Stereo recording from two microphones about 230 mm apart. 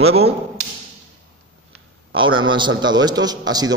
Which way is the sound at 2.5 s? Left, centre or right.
Centre.